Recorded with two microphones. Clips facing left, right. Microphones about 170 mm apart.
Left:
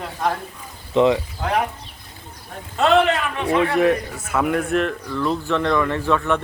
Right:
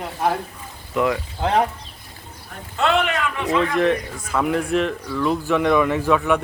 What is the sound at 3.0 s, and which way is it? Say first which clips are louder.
Speech: left 3 dB; 30° left (ahead or behind).